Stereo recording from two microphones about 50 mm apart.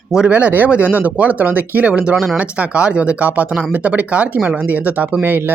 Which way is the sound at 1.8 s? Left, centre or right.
Right.